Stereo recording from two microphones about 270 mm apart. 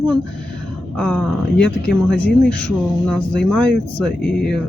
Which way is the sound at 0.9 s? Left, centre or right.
Centre.